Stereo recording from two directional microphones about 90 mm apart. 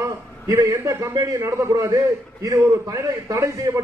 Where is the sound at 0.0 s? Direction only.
35° right (ahead or behind).